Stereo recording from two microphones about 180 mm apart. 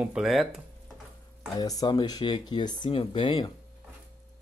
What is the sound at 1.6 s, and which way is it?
Speech, 20° left (ahead or behind).